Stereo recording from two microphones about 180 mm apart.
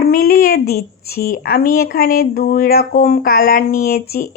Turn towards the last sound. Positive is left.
turn(degrees=60)  # may be behind; listen again after turning